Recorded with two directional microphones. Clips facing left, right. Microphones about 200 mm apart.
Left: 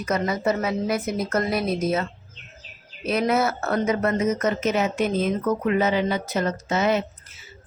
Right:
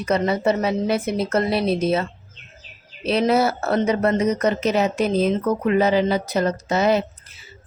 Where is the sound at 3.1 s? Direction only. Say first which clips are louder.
Right 3 dB; 30° right (ahead or behind).